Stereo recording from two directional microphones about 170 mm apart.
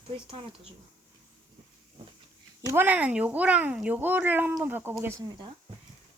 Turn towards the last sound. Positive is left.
turn(degrees=-15)  # may be behind; listen again after turning